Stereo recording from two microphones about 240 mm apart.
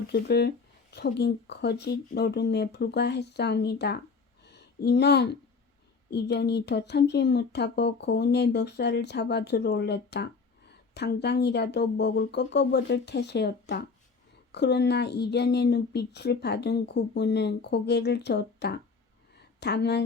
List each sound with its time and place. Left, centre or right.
0.1 s speech: left
4.4 s a sound: left
6.1 s speech: left